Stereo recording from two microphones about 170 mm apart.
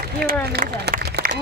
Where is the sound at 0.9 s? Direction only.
65° right (ahead or behind).